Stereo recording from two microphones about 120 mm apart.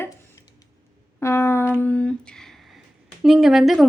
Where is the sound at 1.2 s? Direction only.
20° left (ahead or behind); by 2.8 s 5° left (ahead or behind).